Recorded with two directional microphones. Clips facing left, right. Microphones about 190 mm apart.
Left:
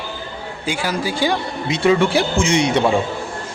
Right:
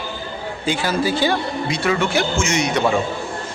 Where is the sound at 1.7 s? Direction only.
25° left (ahead or behind).